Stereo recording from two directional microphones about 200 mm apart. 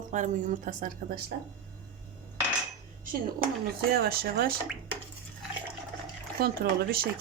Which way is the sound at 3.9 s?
50° right (ahead or behind).